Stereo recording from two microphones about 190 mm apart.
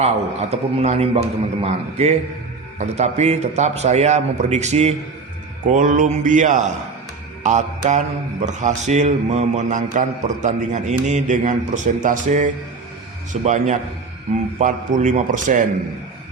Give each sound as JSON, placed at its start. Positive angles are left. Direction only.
{"t": 0.0, "sound": "mantra", "side_deg": -35}
{"t": 5.6, "sound": "a sound", "side_deg": -45}
{"t": 7.4, "sound": "mantra", "side_deg": -40}